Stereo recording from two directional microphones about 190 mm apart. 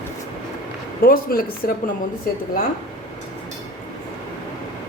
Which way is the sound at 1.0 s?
50° left (ahead or behind).